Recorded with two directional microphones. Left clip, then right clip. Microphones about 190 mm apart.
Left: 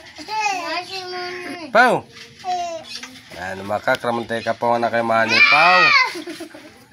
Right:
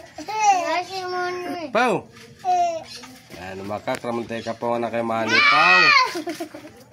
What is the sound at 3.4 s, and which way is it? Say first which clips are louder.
Speech: left 7 dB; 25° left (ahead or behind).